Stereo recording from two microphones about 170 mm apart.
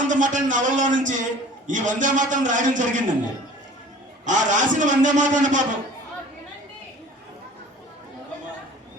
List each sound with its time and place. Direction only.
0.1 s a man's voice: 50° right (ahead or behind)
4.3 s a man's voice: 45° right (ahead or behind)